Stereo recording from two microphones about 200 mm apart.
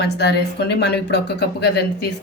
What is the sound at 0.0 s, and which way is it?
Speech, 55° left (ahead or behind).